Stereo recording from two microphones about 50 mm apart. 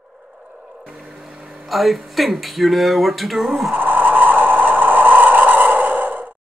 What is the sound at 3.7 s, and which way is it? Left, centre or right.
Vehicle, right.